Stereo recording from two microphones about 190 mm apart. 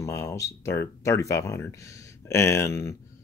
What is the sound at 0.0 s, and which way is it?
Speech, 15° left (ahead or behind).